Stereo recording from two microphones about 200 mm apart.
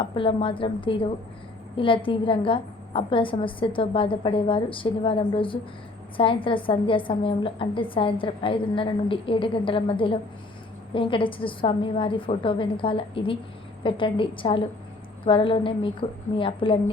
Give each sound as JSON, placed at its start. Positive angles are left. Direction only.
{"t": 0.0, "sound": "a woman's voice", "side_deg": 25}